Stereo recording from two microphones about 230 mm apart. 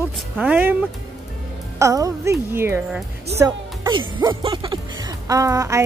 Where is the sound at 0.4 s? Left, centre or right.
Centre.